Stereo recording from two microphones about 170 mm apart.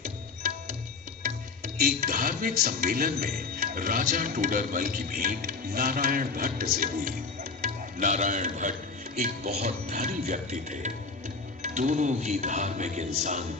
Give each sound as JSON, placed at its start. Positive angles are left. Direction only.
{"t": 0.0, "sound": "music", "side_deg": -50}
{"t": 7.6, "sound": "speech", "side_deg": -45}
{"t": 9.6, "sound": "music", "side_deg": -40}